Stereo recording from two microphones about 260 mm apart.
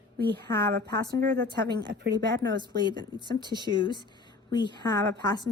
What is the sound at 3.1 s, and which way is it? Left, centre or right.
Speech, centre.